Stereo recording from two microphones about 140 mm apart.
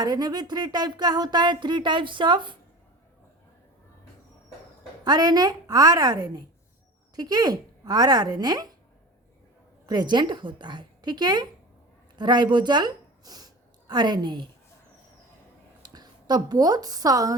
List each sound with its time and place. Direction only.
0.0 s speech: 30° right (ahead or behind)
5.0 s speech: 30° right (ahead or behind)
9.8 s a woman's voice: 30° right (ahead or behind)
15.8 s a woman's voice: 30° right (ahead or behind)